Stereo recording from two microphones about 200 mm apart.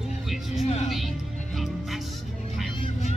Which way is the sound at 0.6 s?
30° left (ahead or behind).